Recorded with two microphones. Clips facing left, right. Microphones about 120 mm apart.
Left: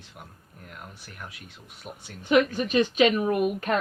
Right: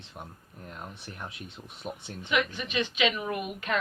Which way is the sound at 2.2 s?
40° left (ahead or behind).